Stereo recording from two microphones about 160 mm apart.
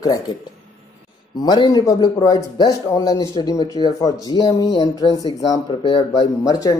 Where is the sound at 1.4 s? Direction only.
25° left (ahead or behind).